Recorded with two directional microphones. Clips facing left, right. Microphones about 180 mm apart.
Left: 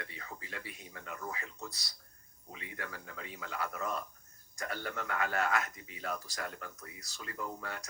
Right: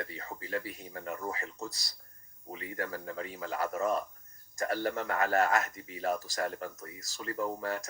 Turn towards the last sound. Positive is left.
turn(degrees=-40)  # may be behind; listen again after turning